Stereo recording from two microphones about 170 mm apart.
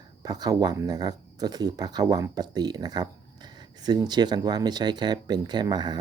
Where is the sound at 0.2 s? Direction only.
25° right (ahead or behind).